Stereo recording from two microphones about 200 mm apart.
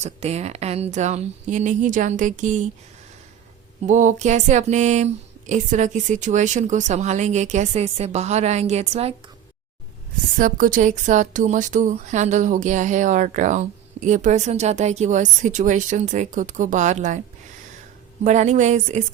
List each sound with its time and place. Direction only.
0.0 s speech: 30° right (ahead or behind)
3.8 s speech: 40° right (ahead or behind)
10.3 s speech: 40° right (ahead or behind)
18.2 s speech: 35° right (ahead or behind)